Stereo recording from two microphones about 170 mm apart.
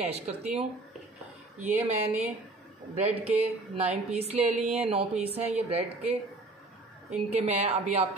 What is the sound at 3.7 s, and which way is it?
A woman's voice, 35° right (ahead or behind).